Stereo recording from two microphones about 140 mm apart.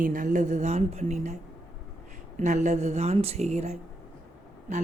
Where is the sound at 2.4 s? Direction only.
55° right (ahead or behind).